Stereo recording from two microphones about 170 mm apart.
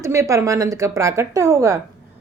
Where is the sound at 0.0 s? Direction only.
15° right (ahead or behind).